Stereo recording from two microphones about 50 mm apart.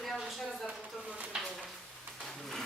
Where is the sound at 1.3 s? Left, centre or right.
Right.